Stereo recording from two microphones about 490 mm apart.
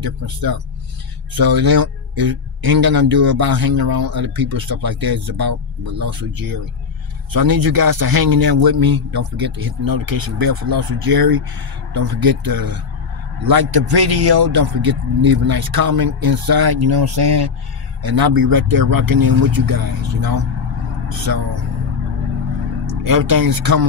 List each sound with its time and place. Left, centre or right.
0.0 s speech: right
23.0 s speech: right